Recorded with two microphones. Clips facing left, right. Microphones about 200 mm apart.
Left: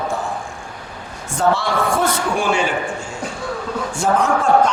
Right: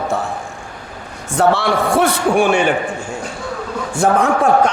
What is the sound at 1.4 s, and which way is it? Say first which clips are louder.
A man's voice: right 3 dB; 65° right (ahead or behind).